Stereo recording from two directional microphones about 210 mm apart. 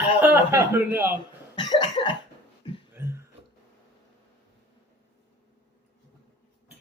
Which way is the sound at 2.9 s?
10° right (ahead or behind).